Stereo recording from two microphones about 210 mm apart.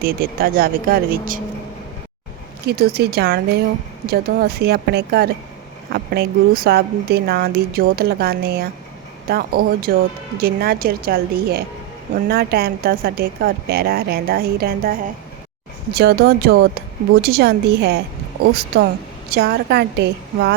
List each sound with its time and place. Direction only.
0.0 s speech: 45° right (ahead or behind)
2.6 s speech: 50° right (ahead or behind)